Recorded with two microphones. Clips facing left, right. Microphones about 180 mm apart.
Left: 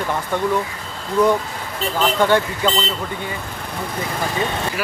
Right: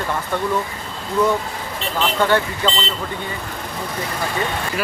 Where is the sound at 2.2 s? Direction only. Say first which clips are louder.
Even; 15° left (ahead or behind).